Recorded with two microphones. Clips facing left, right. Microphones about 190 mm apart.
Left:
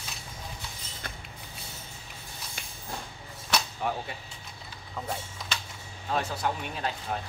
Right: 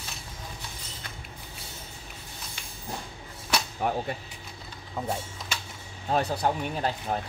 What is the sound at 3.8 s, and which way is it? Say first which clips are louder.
Speech: right 5 dB; 50° right (ahead or behind).